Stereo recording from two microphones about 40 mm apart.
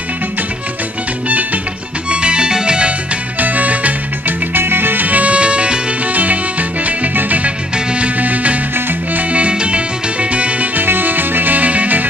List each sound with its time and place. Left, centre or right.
2.0 s music: right
3.3 s music: right
4.6 s music: right
5.0 s music: right
6.0 s music: right
7.7 s music: right
8.2 s music: right
9.3 s music: right
10.8 s music: right